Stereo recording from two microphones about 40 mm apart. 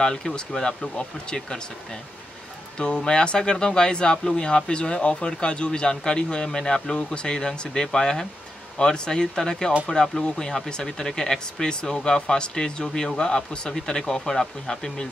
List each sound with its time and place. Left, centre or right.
0.0 s speech: centre
2.8 s speech: centre